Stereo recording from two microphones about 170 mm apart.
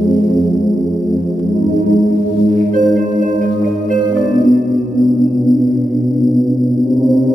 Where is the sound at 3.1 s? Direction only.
50° right (ahead or behind).